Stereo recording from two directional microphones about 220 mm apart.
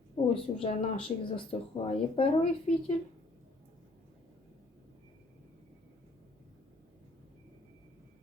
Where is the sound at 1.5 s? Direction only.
25° left (ahead or behind).